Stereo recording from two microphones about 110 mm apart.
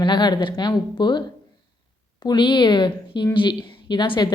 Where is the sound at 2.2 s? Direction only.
45° left (ahead or behind).